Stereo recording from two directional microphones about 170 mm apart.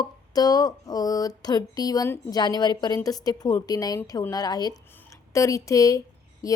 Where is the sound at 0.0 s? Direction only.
20° left (ahead or behind).